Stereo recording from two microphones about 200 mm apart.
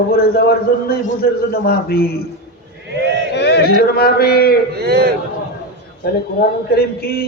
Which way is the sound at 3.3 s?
55° left (ahead or behind).